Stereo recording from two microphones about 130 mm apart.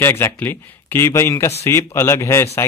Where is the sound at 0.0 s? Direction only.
20° left (ahead or behind).